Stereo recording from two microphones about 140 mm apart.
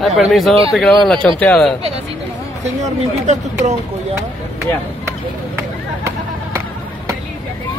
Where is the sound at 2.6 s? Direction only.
55° right (ahead or behind).